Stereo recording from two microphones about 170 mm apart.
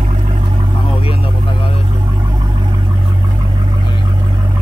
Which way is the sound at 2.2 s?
25° right (ahead or behind).